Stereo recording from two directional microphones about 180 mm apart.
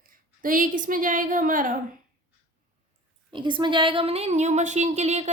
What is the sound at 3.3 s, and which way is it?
Speech, 25° right (ahead or behind).